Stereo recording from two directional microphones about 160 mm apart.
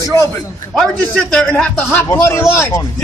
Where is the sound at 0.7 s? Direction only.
5° left (ahead or behind).